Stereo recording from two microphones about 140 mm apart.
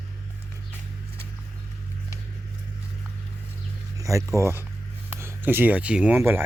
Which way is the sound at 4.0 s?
25° right (ahead or behind).